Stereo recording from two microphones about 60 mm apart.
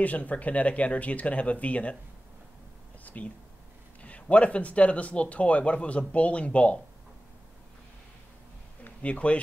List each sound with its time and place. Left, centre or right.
0.0 s speech: left
3.0 s a sound: left
4.0 s speech: left
8.8 s speech: left